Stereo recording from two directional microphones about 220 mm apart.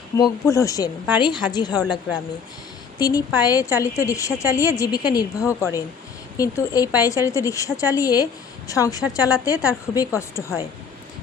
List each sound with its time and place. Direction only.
0.2 s a woman's voice: 15° left (ahead or behind)
3.0 s a woman's voice: 15° left (ahead or behind)